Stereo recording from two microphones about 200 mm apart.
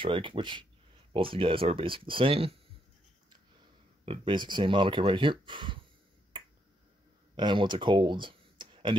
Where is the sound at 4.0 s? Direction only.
25° right (ahead or behind).